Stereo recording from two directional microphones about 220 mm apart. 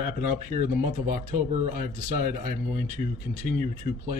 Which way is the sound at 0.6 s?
40° right (ahead or behind).